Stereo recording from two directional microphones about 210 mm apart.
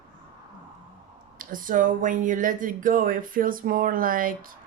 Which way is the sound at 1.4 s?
40° right (ahead or behind).